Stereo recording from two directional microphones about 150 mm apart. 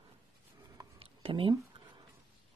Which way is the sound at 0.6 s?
25° right (ahead or behind).